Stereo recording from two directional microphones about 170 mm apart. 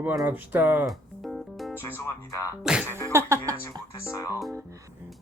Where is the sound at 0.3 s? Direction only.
10° right (ahead or behind).